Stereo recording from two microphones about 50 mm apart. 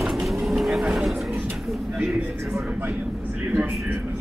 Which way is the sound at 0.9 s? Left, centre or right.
Centre.